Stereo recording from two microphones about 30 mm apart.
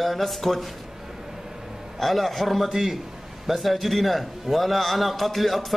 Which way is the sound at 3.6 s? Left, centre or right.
Centre.